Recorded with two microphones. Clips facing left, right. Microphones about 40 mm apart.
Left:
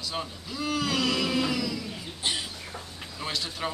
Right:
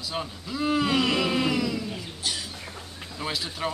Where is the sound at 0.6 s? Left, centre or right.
Right.